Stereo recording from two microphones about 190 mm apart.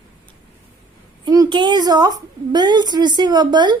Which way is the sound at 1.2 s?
20° right (ahead or behind).